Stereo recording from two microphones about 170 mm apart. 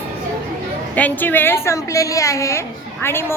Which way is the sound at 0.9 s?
10° left (ahead or behind).